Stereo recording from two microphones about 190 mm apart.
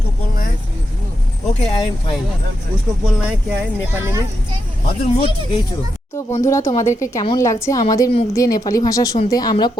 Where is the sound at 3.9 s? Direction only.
15° right (ahead or behind).